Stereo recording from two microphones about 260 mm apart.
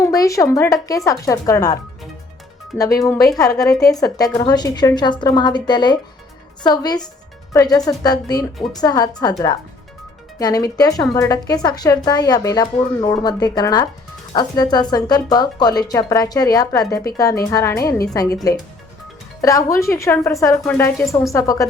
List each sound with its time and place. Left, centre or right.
0.0 s speech: centre
10.3 s speech: centre
19.4 s speech: centre